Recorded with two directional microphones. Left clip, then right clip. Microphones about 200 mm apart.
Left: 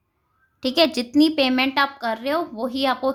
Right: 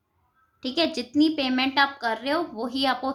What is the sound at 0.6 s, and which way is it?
A woman's voice, 35° left (ahead or behind).